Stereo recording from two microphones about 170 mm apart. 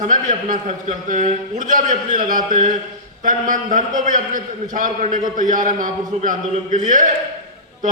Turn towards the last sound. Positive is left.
turn(degrees=-50)  # may be behind; listen again after turning